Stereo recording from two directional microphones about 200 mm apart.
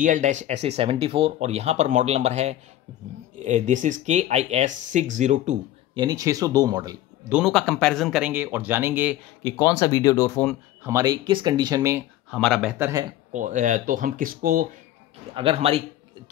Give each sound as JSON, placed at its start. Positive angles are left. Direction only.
{"t": 0.0, "sound": "speech", "side_deg": -40}
{"t": 5.9, "sound": "speech", "side_deg": -20}
{"t": 7.3, "sound": "speech", "side_deg": 0}
{"t": 9.4, "sound": "speech", "side_deg": 15}
{"t": 10.8, "sound": "speech", "side_deg": -15}
{"t": 12.3, "sound": "speech", "side_deg": 0}
{"t": 12.7, "sound": "speech", "side_deg": -10}
{"t": 13.3, "sound": "speech", "side_deg": -40}
{"t": 15.3, "sound": "speech", "side_deg": -30}